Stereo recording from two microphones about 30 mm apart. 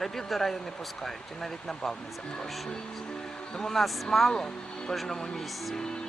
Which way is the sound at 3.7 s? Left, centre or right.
Centre.